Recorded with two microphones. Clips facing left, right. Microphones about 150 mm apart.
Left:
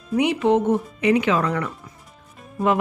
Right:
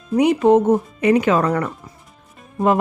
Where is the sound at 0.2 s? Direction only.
40° right (ahead or behind).